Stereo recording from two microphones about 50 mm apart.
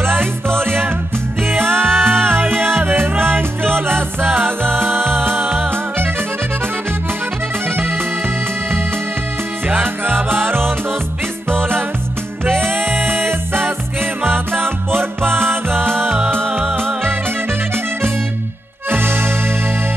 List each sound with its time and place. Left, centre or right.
0.0 s music: right
9.7 s music: right
12.4 s music: right
18.9 s music: right